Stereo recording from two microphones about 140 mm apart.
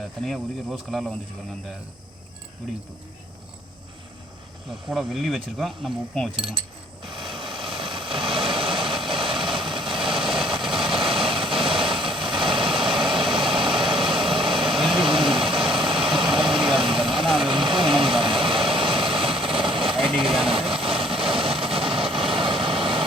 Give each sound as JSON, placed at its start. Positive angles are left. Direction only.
{"t": 0.2, "sound": "speech", "side_deg": 0}
{"t": 4.9, "sound": "speech", "side_deg": 0}
{"t": 6.3, "sound": "speech", "side_deg": -40}
{"t": 7.0, "sound": "vehicle", "side_deg": -35}